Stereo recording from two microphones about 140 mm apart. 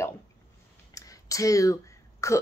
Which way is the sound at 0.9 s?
25° left (ahead or behind).